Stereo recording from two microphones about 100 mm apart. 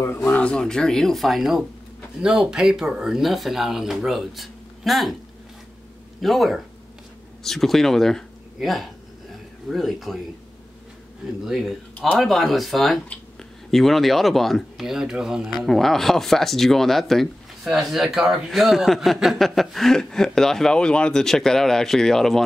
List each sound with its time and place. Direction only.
0.0 s speech: 25° left (ahead or behind)
0.3 s speech: 10° left (ahead or behind)
6.2 s speech: centre (ahead or behind)
11.4 s speech: centre (ahead or behind)